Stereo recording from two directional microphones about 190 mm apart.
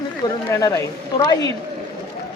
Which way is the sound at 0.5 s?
15° left (ahead or behind).